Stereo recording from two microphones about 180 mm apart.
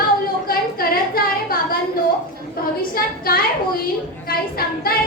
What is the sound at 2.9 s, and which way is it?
A woman's voice, 55° left (ahead or behind).